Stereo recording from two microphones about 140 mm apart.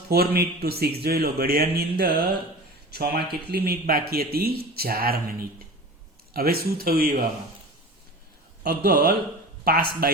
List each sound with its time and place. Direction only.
0.1 s a man's voice: 90° right
6.3 s a man's voice: 90° right
8.6 s a man's voice: 90° right